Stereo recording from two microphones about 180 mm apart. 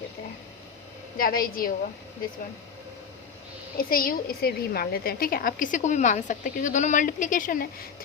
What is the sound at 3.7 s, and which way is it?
A woman's voice, 55° left (ahead or behind).